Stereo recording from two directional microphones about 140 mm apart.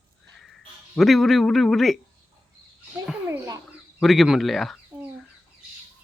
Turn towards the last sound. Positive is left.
turn(degrees=0)  # may be behind; listen again after turning